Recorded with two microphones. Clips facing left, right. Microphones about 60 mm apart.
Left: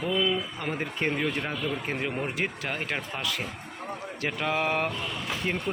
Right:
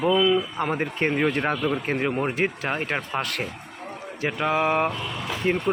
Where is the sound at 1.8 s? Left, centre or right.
Right.